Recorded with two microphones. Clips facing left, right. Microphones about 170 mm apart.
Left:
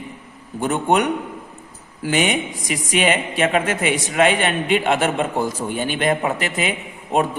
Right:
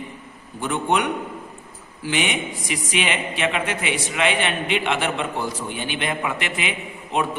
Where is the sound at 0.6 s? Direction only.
45° left (ahead or behind).